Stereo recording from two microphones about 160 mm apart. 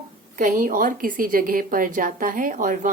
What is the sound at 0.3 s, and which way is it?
A woman's voice, 55° right (ahead or behind).